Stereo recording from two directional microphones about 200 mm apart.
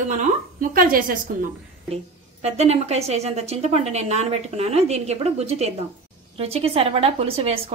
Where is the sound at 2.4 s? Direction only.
30° right (ahead or behind).